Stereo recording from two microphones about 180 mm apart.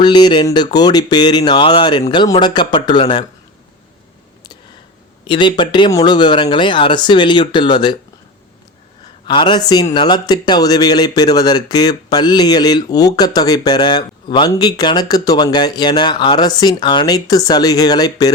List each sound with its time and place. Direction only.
0.0 s speech: 25° left (ahead or behind)
5.2 s speech: 25° left (ahead or behind)
9.2 s speech: 25° left (ahead or behind)